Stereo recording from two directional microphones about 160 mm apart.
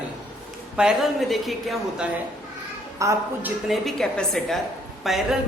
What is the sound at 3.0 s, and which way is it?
Speech, 20° right (ahead or behind).